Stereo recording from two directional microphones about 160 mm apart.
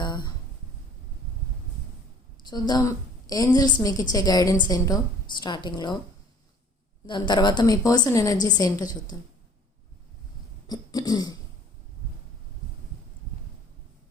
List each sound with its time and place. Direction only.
0.0 s a sound: 25° left (ahead or behind)
2.4 s a woman's voice: 25° left (ahead or behind)
7.1 s a woman's voice: 30° left (ahead or behind)
10.7 s throat clearing: 25° left (ahead or behind)